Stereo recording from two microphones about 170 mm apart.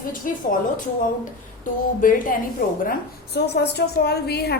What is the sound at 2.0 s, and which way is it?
Speech, 55° left (ahead or behind).